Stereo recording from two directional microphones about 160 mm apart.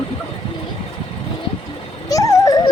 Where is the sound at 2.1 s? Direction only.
20° left (ahead or behind).